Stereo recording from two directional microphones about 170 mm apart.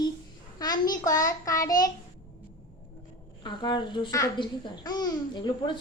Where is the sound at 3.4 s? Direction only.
25° left (ahead or behind).